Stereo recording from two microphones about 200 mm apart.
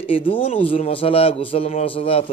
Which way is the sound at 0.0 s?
25° left (ahead or behind).